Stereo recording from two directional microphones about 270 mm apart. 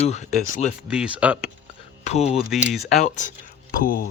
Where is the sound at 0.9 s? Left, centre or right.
Centre.